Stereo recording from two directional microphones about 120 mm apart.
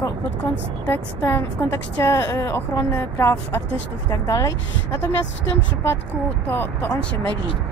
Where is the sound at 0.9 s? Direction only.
20° left (ahead or behind).